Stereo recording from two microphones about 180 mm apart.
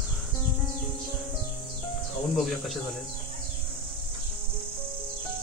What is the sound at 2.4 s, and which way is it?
Speech, centre (ahead or behind).